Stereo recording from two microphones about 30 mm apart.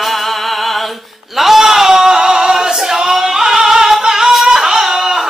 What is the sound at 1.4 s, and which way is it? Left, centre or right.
Male singing, centre.